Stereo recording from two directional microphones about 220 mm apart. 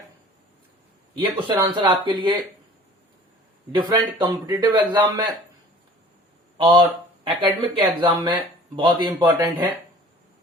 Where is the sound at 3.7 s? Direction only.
20° right (ahead or behind).